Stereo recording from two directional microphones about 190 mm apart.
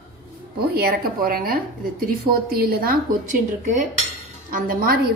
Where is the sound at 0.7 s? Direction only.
50° right (ahead or behind).